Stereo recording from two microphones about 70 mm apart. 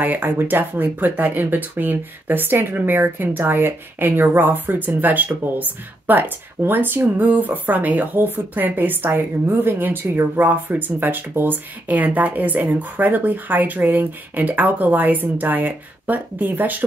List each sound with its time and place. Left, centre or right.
0.0 s speech: right